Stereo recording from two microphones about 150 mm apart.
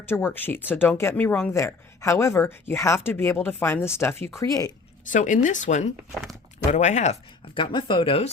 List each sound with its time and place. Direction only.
0.1 s speech: 15° left (ahead or behind)
5.0 s speech: 55° left (ahead or behind)
7.5 s speech: 35° left (ahead or behind)